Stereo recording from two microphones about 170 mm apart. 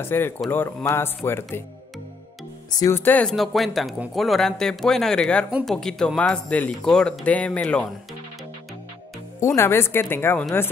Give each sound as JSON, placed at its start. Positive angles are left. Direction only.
{"t": 0.0, "sound": "speech", "side_deg": 15}
{"t": 2.7, "sound": "speech", "side_deg": 15}
{"t": 9.6, "sound": "speech", "side_deg": 15}